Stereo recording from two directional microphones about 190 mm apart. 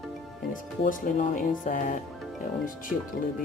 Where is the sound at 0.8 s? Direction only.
40° left (ahead or behind).